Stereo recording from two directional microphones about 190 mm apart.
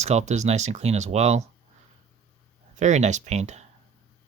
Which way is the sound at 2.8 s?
40° right (ahead or behind).